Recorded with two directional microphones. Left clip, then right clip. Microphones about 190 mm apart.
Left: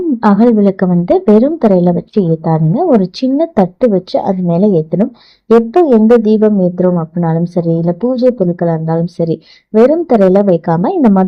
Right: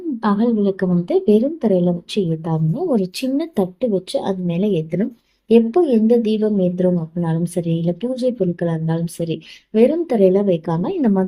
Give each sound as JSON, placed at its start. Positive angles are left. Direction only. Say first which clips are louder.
{"t": 0.2, "sound": "a woman's voice", "louder": "left 8 dB", "side_deg": 35}
{"t": 11.0, "sound": "a woman's voice", "louder": "left 7 dB", "side_deg": 25}